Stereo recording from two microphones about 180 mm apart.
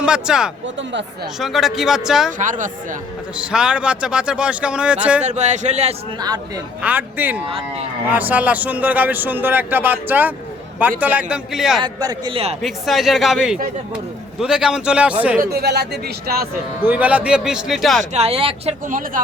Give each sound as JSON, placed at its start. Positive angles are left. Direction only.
{"t": 0.0, "sound": "speech", "side_deg": -5}
{"t": 2.4, "sound": "speech", "side_deg": -45}
{"t": 3.3, "sound": "speech", "side_deg": -5}
{"t": 5.2, "sound": "speech", "side_deg": -40}
{"t": 6.1, "sound": "a man's voice", "side_deg": -20}
{"t": 6.8, "sound": "a man's voice", "side_deg": -10}
{"t": 11.8, "sound": "a man's voice", "side_deg": -25}
{"t": 12.6, "sound": "speech", "side_deg": 0}
{"t": 15.4, "sound": "speech", "side_deg": -60}
{"t": 16.8, "sound": "speech", "side_deg": -10}
{"t": 18.1, "sound": "speech", "side_deg": -35}
{"t": 18.9, "sound": "speech", "side_deg": -50}